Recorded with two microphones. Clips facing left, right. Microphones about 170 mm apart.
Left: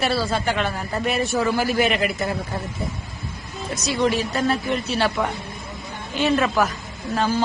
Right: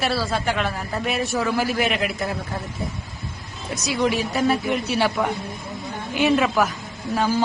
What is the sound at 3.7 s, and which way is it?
A man's voice, centre (ahead or behind).